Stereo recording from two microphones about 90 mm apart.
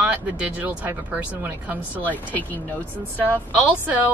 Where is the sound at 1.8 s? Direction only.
20° left (ahead or behind).